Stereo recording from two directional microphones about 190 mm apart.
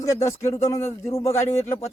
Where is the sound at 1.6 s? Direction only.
15° left (ahead or behind).